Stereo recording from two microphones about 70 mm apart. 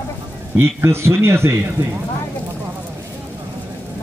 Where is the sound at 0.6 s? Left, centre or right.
Right.